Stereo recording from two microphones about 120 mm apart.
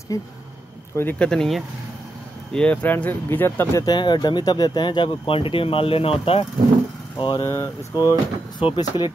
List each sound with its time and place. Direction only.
0.1 s speech: 25° left (ahead or behind)
0.9 s speech: 15° left (ahead or behind)
3.8 s speech: 35° left (ahead or behind)
7.2 s speech: 40° left (ahead or behind)
7.4 s speech: 25° left (ahead or behind)